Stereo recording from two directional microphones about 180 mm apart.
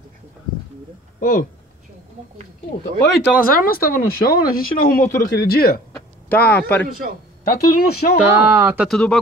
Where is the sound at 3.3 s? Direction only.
50° left (ahead or behind).